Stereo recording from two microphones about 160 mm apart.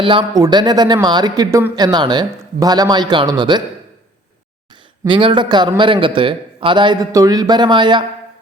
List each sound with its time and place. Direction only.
0.0 s a man's voice: 30° right (ahead or behind)
4.7 s a man's voice: 30° right (ahead or behind)